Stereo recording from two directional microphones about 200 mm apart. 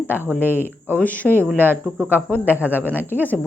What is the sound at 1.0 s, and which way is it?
Speech, 10° left (ahead or behind).